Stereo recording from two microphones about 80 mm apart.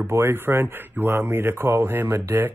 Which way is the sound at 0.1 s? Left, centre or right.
Right.